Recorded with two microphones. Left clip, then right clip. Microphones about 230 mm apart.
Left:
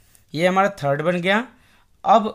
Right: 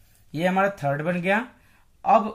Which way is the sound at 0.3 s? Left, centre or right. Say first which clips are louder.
Left 4 dB; left.